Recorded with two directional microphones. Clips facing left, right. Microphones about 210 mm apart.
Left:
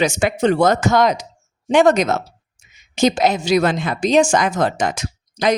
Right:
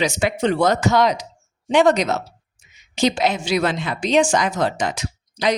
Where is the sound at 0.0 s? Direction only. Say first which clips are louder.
Left 3 dB; 50° left (ahead or behind).